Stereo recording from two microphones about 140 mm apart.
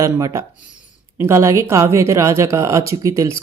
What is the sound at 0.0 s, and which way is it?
Speech, 25° right (ahead or behind).